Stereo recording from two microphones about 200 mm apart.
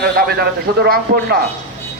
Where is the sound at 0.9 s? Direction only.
55° right (ahead or behind).